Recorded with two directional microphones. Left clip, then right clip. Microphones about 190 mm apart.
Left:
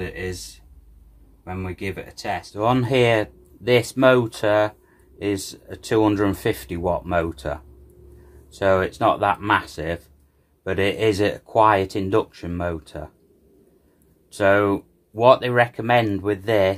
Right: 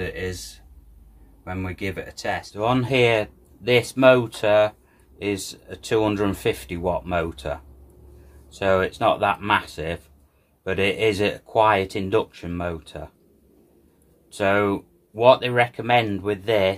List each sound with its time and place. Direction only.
0.0 s speech: 5° right (ahead or behind)
1.4 s speech: 10° right (ahead or behind)
2.5 s speech: 40° left (ahead or behind)
14.3 s speech: 35° left (ahead or behind)